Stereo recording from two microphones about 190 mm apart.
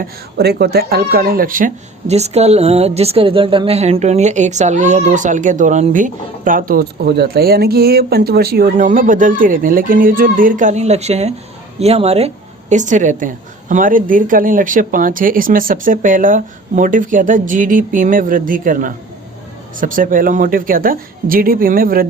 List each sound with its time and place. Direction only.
0.0 s speech: 55° right (ahead or behind)